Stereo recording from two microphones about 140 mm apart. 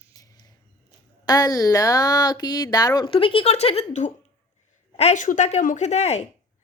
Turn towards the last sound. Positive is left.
turn(degrees=50)  # may be behind; listen again after turning